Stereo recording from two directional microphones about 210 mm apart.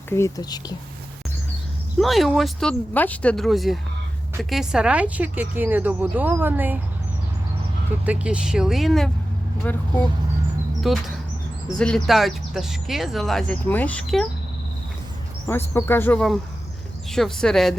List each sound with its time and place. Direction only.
0.1 s speech: 15° left (ahead or behind)
2.0 s speech: centre (ahead or behind)
8.0 s speech: 5° right (ahead or behind)
10.8 s speech: centre (ahead or behind)
15.4 s speech: 10° left (ahead or behind)